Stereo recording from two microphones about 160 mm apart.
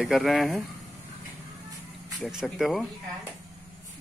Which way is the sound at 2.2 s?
5° right (ahead or behind).